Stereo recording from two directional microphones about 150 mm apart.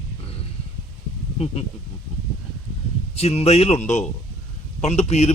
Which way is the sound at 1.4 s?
45° left (ahead or behind).